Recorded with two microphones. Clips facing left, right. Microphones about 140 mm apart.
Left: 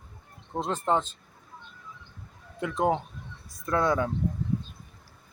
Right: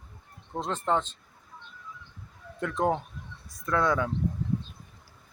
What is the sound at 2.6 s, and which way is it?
Speech, 5° left (ahead or behind).